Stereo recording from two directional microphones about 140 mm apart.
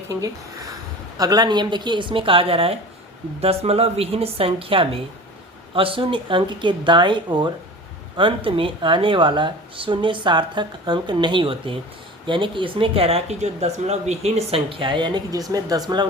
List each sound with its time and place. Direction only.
0.1 s a woman's voice: 25° right (ahead or behind)